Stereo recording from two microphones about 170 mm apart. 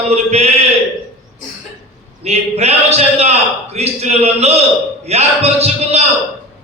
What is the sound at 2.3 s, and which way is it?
A man's voice, 40° right (ahead or behind).